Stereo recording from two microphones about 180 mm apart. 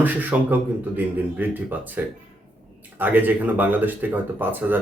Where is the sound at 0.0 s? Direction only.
10° right (ahead or behind).